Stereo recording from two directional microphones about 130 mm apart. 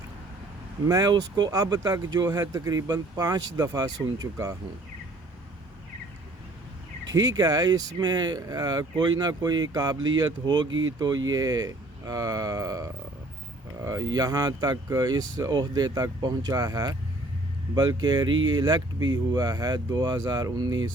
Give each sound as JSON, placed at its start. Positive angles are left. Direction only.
{"t": 0.9, "sound": "speech", "side_deg": -30}
{"t": 7.1, "sound": "speech", "side_deg": -30}